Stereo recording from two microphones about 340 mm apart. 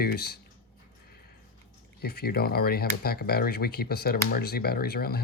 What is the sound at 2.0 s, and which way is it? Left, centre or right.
Speech, left.